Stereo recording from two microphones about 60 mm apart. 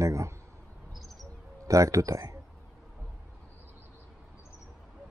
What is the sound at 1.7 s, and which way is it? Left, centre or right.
Speech, right.